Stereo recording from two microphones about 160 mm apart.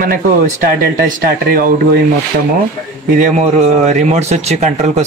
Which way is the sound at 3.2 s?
50° right (ahead or behind).